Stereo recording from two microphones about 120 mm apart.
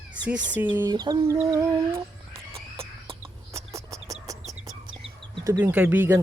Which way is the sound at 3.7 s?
25° right (ahead or behind).